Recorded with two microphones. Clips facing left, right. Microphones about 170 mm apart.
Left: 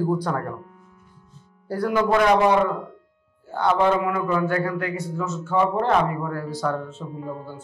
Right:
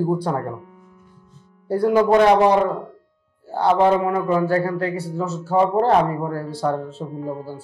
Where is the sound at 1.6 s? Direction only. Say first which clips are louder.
Right 5 dB; 30° right (ahead or behind).